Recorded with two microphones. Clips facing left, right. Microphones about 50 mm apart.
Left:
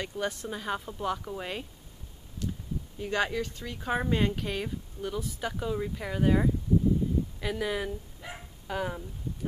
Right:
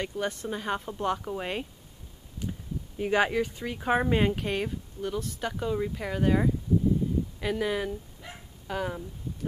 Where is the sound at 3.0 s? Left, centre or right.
Centre.